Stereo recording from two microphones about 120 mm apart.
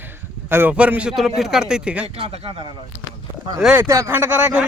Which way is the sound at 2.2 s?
55° right (ahead or behind).